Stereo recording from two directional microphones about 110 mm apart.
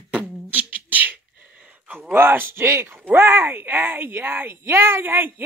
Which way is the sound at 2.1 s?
20° right (ahead or behind).